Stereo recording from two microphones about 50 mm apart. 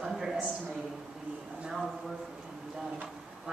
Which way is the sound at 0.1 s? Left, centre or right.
Centre.